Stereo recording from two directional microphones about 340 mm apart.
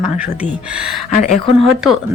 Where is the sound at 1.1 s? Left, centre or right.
Left.